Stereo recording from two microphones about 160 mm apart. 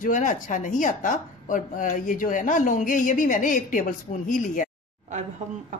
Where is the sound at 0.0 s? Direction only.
55° left (ahead or behind).